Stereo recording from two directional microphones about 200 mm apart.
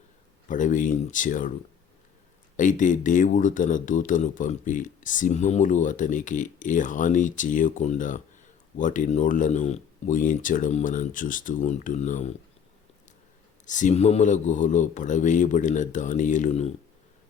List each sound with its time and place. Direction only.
0.4 s speech: 40° left (ahead or behind)
2.6 s speech: 40° left (ahead or behind)
13.7 s speech: 40° left (ahead or behind)